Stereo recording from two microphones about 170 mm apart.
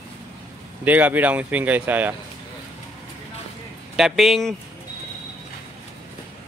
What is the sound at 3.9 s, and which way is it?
Speech, centre (ahead or behind).